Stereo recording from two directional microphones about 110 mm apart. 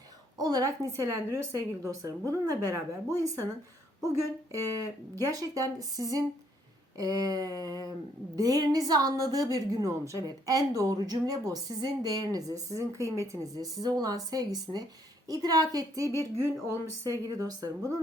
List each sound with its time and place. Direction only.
0.3 s a woman's voice: 35° right (ahead or behind)